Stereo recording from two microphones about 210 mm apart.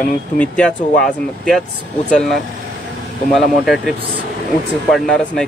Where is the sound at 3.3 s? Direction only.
Centre (ahead or behind).